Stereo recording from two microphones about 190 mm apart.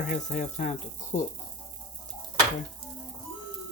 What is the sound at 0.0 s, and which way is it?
Speech, 40° left (ahead or behind).